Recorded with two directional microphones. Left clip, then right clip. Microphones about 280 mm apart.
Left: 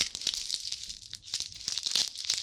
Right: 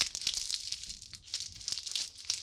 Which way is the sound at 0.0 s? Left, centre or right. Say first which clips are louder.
Left 2 dB; centre.